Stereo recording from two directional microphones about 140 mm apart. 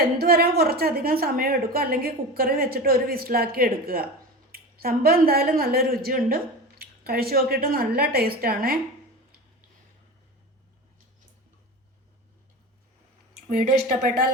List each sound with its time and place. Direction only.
0.2 s a woman's voice: 90° right
13.5 s speech: 80° right